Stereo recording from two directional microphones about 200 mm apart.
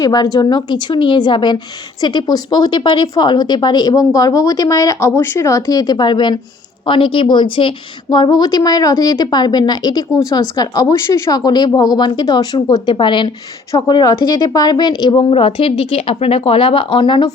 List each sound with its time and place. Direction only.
0.0 s a woman's voice: 20° left (ahead or behind)